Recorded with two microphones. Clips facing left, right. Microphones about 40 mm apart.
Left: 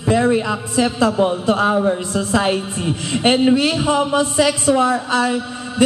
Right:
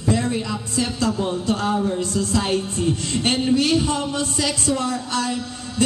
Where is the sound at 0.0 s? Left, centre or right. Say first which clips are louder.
Left 6 dB; left.